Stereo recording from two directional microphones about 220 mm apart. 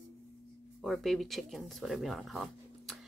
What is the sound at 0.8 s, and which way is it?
Speech, centre (ahead or behind).